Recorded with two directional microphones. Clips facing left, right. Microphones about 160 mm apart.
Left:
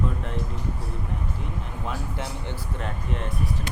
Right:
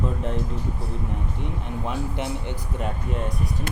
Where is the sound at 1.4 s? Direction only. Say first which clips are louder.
Right 4 dB; 20° right (ahead or behind).